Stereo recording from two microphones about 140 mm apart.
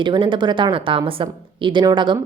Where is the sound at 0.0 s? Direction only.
35° right (ahead or behind).